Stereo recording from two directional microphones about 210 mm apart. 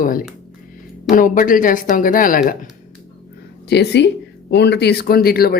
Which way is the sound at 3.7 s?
55° left (ahead or behind).